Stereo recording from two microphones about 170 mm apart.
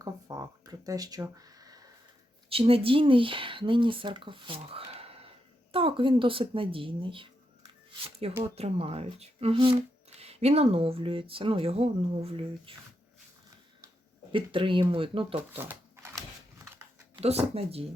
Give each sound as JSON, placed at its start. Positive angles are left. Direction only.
{"t": 0.0, "sound": "speech", "side_deg": -20}
{"t": 2.5, "sound": "speech", "side_deg": -35}
{"t": 7.6, "sound": "a sound", "side_deg": -30}
{"t": 8.5, "sound": "speech", "side_deg": -35}
{"t": 14.3, "sound": "speech", "side_deg": -30}
{"t": 15.5, "sound": "shuffling cards", "side_deg": -10}
{"t": 17.2, "sound": "speech", "side_deg": -35}